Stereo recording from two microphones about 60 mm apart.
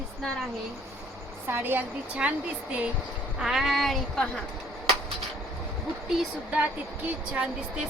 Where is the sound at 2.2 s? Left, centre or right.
Centre.